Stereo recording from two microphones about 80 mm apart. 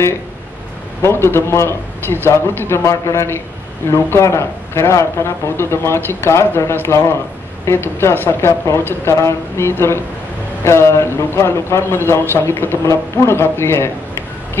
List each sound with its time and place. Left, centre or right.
1.0 s speech: left